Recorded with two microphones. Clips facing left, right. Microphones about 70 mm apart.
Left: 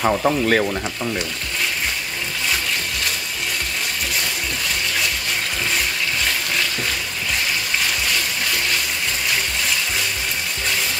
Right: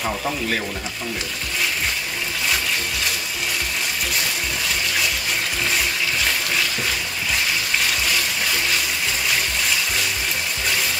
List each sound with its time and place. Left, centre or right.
0.0 s speech: left